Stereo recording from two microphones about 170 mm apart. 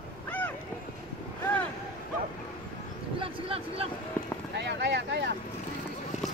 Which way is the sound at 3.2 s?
35° right (ahead or behind).